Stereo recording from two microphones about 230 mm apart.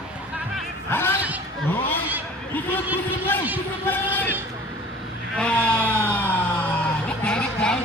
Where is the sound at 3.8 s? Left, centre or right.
Centre.